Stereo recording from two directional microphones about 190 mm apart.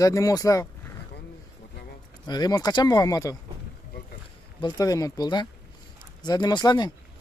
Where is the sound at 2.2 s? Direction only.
20° left (ahead or behind).